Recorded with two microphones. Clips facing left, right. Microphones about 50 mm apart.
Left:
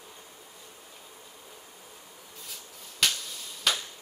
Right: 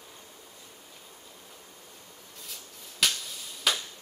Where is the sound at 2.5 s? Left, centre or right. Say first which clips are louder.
Right 1 dB; centre.